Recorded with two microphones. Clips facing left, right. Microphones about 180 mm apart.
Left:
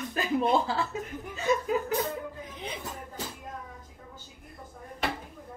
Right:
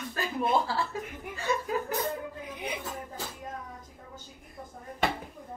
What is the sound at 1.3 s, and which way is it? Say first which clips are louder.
Speech: left 4 dB; 20° left (ahead or behind).